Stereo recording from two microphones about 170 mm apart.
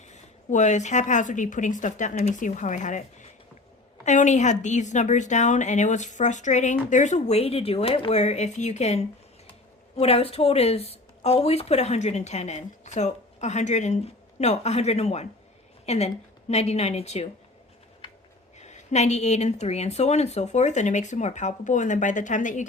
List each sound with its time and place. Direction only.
0.1 s a woman's voice: 45° left (ahead or behind)
18.6 s a woman's voice: 40° left (ahead or behind)